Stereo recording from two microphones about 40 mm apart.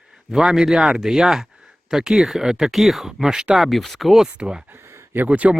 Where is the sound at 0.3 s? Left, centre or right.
Centre.